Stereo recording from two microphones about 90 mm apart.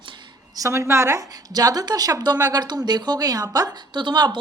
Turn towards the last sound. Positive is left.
turn(degrees=-55)  # may be behind; listen again after turning